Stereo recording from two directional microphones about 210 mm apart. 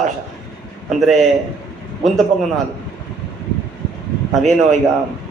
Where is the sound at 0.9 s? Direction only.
Centre (ahead or behind).